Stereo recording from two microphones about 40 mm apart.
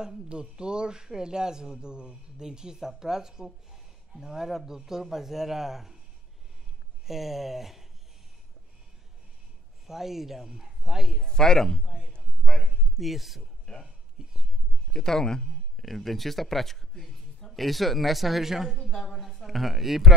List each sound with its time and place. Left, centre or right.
0.3 s speech: right
7.1 s speech: centre
9.8 s speech: centre
11.2 s a man's voice: centre
12.4 s a sound: centre
12.9 s speech: centre
14.2 s whispering: centre
14.9 s a man's voice: centre
15.7 s speech: centre
18.8 s a man's voice: centre
19.0 s speech: centre